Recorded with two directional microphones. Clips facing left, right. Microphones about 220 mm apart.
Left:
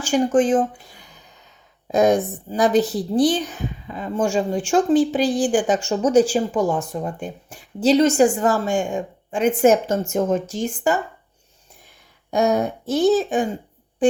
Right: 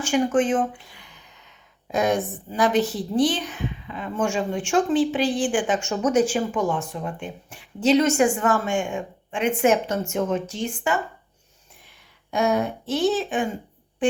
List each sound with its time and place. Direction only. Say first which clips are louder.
0.0 s a woman's voice: left 3 dB; 35° left (ahead or behind)
12.3 s a woman's voice: left 3 dB; 40° left (ahead or behind)